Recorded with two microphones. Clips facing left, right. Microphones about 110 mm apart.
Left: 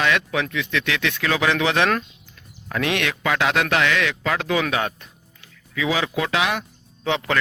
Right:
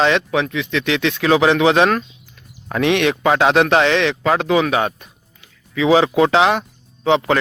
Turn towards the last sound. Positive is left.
turn(degrees=-25)  # may be behind; listen again after turning